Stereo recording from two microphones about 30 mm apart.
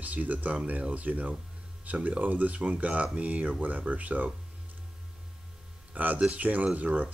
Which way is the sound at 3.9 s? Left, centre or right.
Right.